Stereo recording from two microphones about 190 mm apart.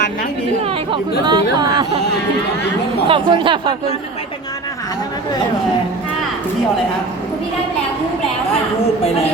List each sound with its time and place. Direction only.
0.6 s chatter: 30° right (ahead or behind)
3.1 s speech: 25° right (ahead or behind)